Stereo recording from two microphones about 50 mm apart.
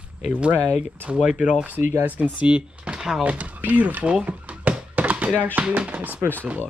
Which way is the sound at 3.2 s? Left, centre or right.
Right.